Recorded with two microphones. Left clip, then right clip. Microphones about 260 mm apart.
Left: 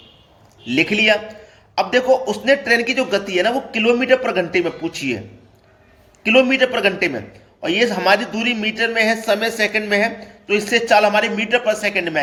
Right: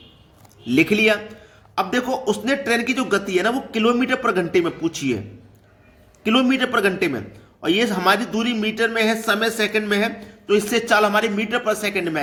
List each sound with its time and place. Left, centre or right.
0.9 s a man's voice: centre
6.2 s a man's voice: centre